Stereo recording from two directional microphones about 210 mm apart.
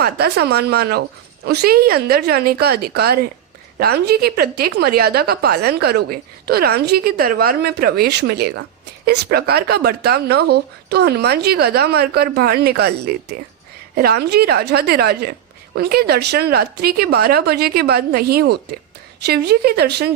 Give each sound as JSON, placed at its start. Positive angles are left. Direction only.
{"t": 0.0, "sound": "a woman's voice", "side_deg": -50}